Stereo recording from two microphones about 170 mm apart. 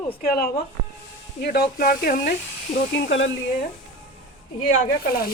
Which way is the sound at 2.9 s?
90° left.